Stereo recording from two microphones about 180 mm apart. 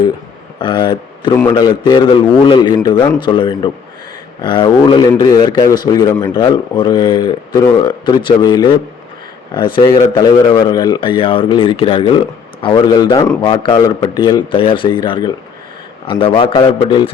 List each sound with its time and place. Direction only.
0.6 s a man's voice: 25° left (ahead or behind)